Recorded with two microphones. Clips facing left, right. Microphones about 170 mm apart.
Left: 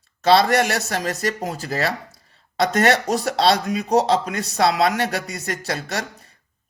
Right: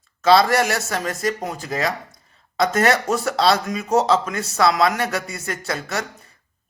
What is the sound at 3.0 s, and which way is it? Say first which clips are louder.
Speech: even; 30° left (ahead or behind).